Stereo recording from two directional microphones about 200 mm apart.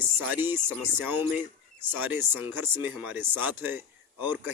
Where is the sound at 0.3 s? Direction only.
10° right (ahead or behind).